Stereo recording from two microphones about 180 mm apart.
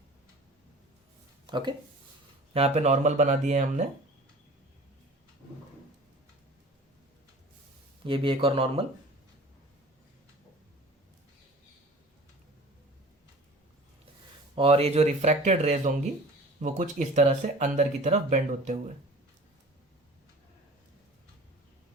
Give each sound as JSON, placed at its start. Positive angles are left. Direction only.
{"t": 1.5, "sound": "speech", "side_deg": -25}
{"t": 8.0, "sound": "speech", "side_deg": -30}
{"t": 14.5, "sound": "speech", "side_deg": -30}